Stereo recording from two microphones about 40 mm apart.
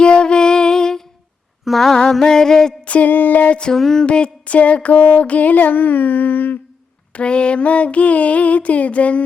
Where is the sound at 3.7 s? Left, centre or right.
Centre.